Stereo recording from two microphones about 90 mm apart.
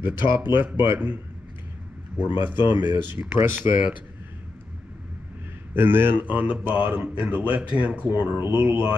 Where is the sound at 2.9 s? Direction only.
20° right (ahead or behind).